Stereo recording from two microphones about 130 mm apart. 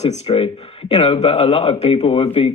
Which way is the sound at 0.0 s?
50° left (ahead or behind).